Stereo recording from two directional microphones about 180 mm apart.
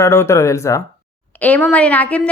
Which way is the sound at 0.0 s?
15° left (ahead or behind).